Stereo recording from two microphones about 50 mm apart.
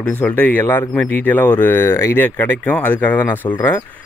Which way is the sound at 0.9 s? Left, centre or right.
Left.